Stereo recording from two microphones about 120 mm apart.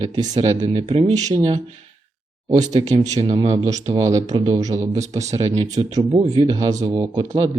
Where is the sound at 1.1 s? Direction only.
30° right (ahead or behind).